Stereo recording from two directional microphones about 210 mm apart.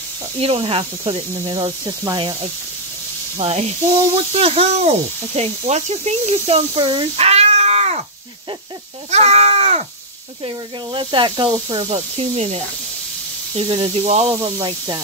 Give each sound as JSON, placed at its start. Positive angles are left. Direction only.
{"t": 0.4, "sound": "speech", "side_deg": -25}
{"t": 3.3, "sound": "speech", "side_deg": -30}
{"t": 9.1, "sound": "speech", "side_deg": -30}
{"t": 13.6, "sound": "speech", "side_deg": -30}
{"t": 14.3, "sound": "speech", "side_deg": -15}